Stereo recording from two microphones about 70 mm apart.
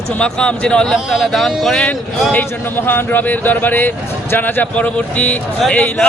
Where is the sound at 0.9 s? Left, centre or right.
Centre.